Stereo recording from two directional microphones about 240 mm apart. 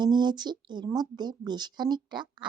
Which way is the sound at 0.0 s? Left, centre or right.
Centre.